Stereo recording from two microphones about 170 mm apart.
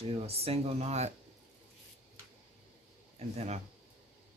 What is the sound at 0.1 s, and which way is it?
Speech, 35° right (ahead or behind).